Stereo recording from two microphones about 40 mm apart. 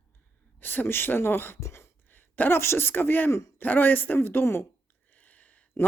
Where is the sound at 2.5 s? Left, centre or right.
Left.